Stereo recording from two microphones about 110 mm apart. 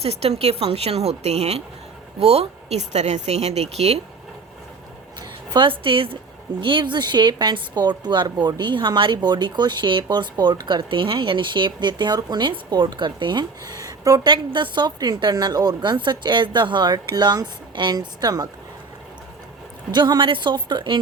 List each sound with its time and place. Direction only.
0.0 s speech: 70° right (ahead or behind)
5.5 s a woman's voice: 50° right (ahead or behind); by 14.2 s 30° right (ahead or behind)
14.3 s a woman's voice: 45° right (ahead or behind)
19.9 s a woman's voice: 40° right (ahead or behind)